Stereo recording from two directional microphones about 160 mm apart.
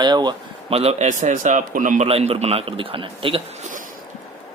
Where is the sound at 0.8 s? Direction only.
45° right (ahead or behind).